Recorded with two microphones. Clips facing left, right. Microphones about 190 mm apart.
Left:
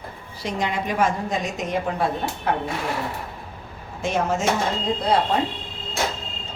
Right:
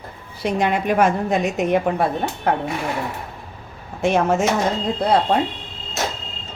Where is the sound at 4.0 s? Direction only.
60° right (ahead or behind).